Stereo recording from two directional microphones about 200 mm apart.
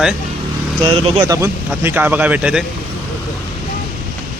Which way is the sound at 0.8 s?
25° right (ahead or behind).